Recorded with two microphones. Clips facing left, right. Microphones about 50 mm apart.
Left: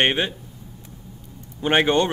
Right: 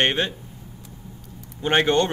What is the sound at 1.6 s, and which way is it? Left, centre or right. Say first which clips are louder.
Speech: left 1 dB; centre.